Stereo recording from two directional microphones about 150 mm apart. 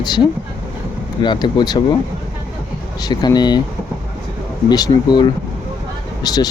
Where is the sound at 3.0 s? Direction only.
25° left (ahead or behind).